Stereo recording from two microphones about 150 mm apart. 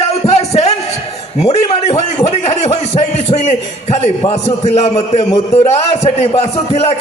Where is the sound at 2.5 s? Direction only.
45° left (ahead or behind).